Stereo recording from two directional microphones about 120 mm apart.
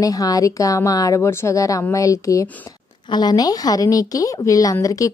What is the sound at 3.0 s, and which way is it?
Speech, 35° left (ahead or behind).